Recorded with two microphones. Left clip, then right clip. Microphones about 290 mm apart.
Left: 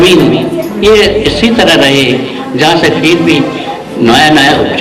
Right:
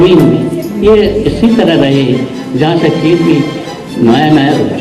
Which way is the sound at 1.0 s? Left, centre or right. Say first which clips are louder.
Left 3 dB; centre.